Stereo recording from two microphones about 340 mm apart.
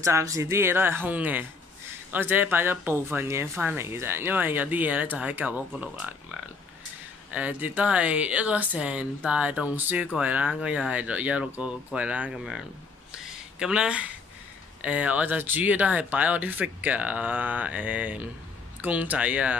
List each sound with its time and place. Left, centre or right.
0.0 s speech: centre
7.3 s speech: centre
13.1 s a sound: centre
14.8 s speech: centre